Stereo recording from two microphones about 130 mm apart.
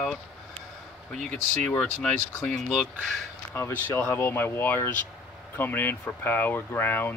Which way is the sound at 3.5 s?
20° left (ahead or behind).